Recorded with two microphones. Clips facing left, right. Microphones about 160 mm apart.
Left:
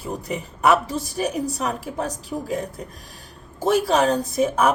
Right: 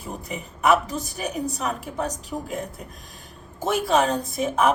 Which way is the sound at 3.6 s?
35° left (ahead or behind).